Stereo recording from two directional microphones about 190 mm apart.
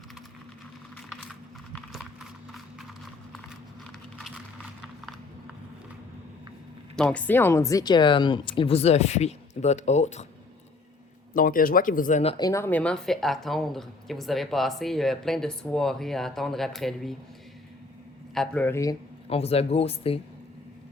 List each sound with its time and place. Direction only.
2.7 s clip-clop: centre (ahead or behind)
4.2 s typing: centre (ahead or behind)
6.9 s speech: 5° left (ahead or behind); by 10.2 s 35° left (ahead or behind)
11.3 s speech: 45° left (ahead or behind)
12.4 s a woman's voice: 15° left (ahead or behind); by 17.2 s centre (ahead or behind)
18.3 s a man's voice: 10° left (ahead or behind)
19.3 s speech: 30° left (ahead or behind)